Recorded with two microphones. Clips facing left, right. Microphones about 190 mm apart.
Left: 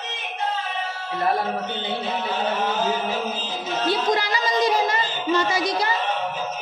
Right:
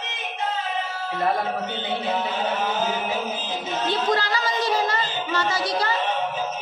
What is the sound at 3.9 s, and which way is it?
Music, 15° left (ahead or behind).